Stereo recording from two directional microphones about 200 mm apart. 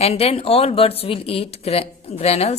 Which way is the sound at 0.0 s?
30° left (ahead or behind).